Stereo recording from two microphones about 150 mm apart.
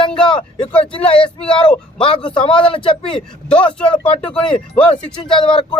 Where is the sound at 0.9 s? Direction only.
35° left (ahead or behind).